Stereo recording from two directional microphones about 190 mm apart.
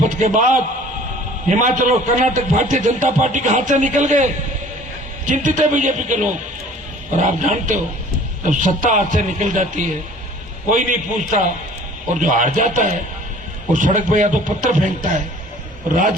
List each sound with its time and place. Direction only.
0.2 s a man's voice: 40° right (ahead or behind)